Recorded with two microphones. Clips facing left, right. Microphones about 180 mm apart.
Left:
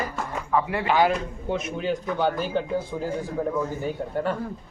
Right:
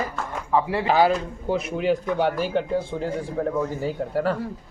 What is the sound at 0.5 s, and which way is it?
A man's voice, 30° right (ahead or behind).